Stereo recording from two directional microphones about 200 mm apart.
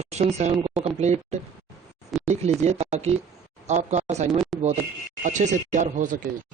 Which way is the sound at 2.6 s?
35° right (ahead or behind).